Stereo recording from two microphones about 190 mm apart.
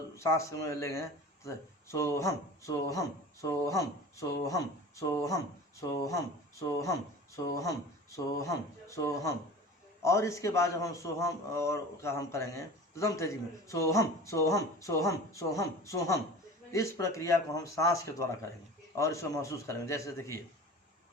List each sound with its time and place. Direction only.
0.2 s a man's voice: 15° left (ahead or behind)